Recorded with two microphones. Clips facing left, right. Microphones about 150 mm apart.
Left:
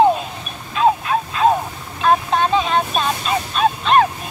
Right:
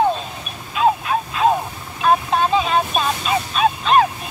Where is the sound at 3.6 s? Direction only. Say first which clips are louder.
Left 1 dB; 5° right (ahead or behind).